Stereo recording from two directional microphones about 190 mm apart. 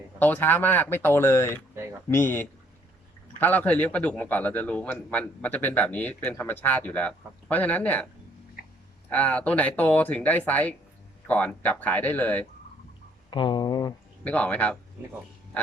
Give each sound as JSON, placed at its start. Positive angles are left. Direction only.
{"t": 0.2, "sound": "speech", "side_deg": 10}
{"t": 9.0, "sound": "speech", "side_deg": 10}
{"t": 13.3, "sound": "speech", "side_deg": 25}
{"t": 14.3, "sound": "speech", "side_deg": 5}